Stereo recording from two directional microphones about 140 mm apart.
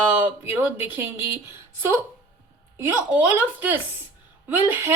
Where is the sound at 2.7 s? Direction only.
15° right (ahead or behind).